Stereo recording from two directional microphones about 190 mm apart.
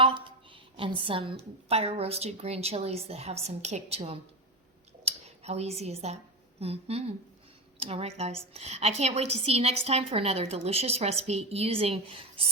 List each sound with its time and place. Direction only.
0.0 s a woman's voice: 25° right (ahead or behind)